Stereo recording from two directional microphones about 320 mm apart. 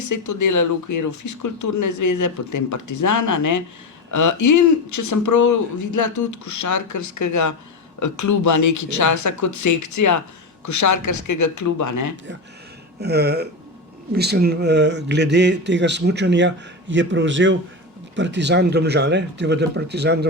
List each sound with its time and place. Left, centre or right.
0.0 s speech: left
13.0 s speech: right